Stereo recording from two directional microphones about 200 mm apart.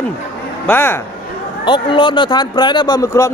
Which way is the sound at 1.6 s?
25° left (ahead or behind).